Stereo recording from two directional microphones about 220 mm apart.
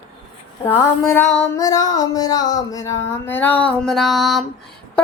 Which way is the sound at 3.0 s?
10° left (ahead or behind).